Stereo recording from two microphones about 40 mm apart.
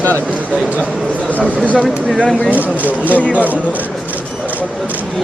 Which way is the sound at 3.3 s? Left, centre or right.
Right.